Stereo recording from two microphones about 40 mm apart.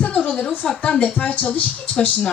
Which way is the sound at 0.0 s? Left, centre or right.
Left.